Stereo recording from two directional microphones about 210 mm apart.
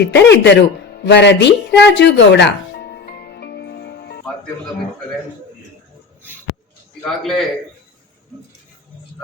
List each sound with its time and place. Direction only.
0.0 s music: 55° left (ahead or behind)
7.0 s a man's voice: centre (ahead or behind)